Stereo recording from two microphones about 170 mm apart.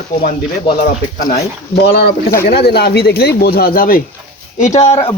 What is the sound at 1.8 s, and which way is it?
Speech, 70° left (ahead or behind).